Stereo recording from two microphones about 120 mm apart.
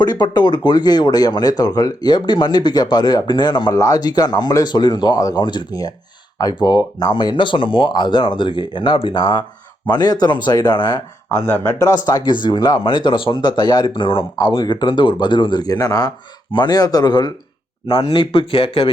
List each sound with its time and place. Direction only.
0.0 s speech: 35° left (ahead or behind)
11.3 s speech: 20° left (ahead or behind)
12.0 s speech: 35° left (ahead or behind)